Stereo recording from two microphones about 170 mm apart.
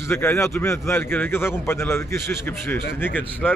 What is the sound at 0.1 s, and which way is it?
A man's voice, 15° left (ahead or behind).